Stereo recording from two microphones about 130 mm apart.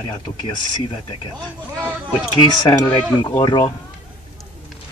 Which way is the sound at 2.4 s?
35° left (ahead or behind).